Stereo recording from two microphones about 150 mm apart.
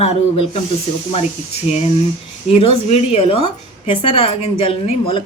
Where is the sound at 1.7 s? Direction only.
50° left (ahead or behind).